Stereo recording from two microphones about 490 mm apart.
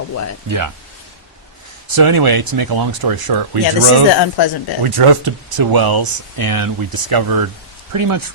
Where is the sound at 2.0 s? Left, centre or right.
Right.